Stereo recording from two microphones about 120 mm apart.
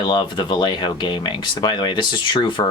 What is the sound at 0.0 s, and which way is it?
Speech, 40° left (ahead or behind).